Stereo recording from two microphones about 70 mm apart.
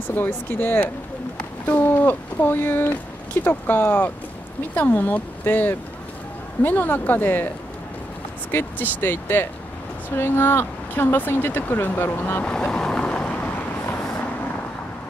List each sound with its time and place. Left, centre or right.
0.1 s speech: left
12.4 s boat: centre